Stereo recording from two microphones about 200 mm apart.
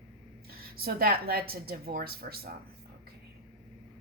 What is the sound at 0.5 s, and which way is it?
Speech, 50° right (ahead or behind).